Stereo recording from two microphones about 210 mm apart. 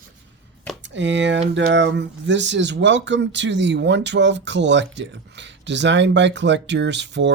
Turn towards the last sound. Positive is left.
turn(degrees=-55)  # may be behind; listen again after turning